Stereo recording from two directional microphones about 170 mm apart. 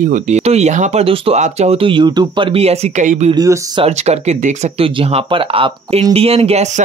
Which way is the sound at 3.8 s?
40° right (ahead or behind).